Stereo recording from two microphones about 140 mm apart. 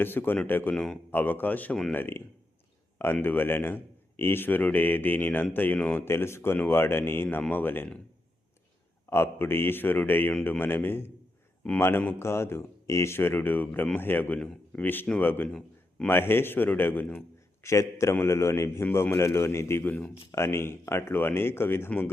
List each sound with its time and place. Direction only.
0.0 s a man's voice: 15° left (ahead or behind)
9.0 s a man's voice: 15° left (ahead or behind)